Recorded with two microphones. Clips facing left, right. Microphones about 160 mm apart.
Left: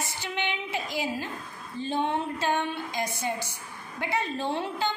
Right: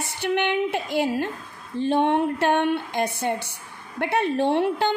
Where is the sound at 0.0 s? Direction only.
60° right (ahead or behind).